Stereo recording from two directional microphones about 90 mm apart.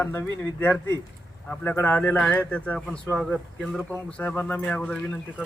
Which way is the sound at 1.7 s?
20° left (ahead or behind).